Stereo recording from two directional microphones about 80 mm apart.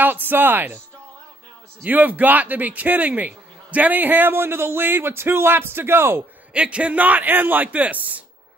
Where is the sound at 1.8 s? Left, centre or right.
Centre.